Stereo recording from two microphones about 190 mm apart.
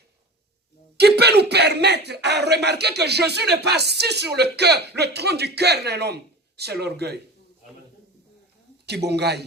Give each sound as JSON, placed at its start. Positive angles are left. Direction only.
{"t": 0.9, "sound": "a man's voice", "side_deg": -60}
{"t": 8.9, "sound": "a man's voice", "side_deg": -60}